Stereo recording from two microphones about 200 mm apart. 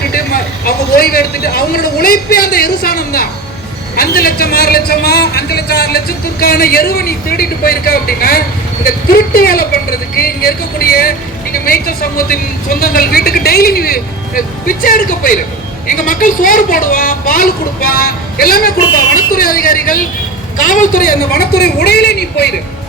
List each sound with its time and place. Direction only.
0.7 s a man's voice: 50° left (ahead or behind)